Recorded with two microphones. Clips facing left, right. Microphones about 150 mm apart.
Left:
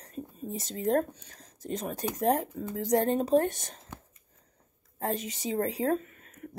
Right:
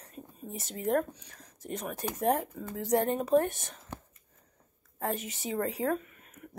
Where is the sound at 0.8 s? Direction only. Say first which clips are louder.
Left 2 dB; 35° left (ahead or behind).